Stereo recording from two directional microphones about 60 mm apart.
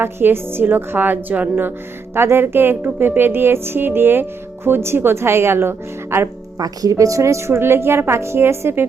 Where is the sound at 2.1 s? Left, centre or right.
Right.